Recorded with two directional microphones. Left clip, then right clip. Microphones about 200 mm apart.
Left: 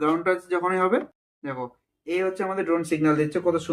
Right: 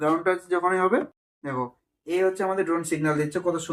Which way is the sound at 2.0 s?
40° left (ahead or behind).